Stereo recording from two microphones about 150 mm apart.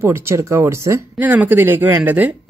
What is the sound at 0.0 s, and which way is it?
Speech, 15° right (ahead or behind).